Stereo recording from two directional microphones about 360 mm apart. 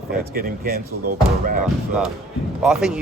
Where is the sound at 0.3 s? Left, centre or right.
Right.